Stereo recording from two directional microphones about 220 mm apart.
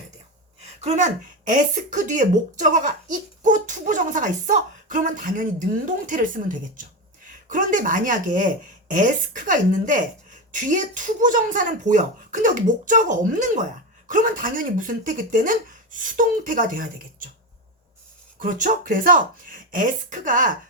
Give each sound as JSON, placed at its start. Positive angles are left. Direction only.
{"t": 0.6, "sound": "speech", "side_deg": -30}
{"t": 18.3, "sound": "speech", "side_deg": -40}